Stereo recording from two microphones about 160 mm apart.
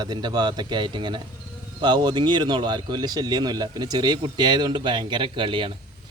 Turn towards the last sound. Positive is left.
turn(degrees=-30)  # may be behind; listen again after turning